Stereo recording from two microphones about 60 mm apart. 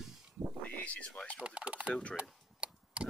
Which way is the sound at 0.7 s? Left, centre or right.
Left.